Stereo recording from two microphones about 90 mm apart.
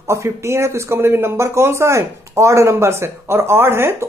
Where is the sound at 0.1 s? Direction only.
30° right (ahead or behind).